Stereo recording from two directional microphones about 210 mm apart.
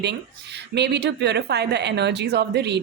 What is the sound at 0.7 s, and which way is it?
A woman's voice, 55° right (ahead or behind).